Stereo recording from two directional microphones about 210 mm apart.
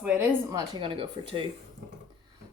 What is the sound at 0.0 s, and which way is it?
Speech, 5° right (ahead or behind).